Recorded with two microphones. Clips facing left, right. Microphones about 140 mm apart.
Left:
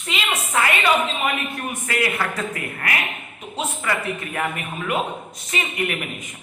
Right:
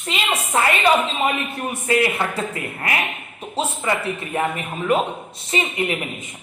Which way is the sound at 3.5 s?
30° right (ahead or behind).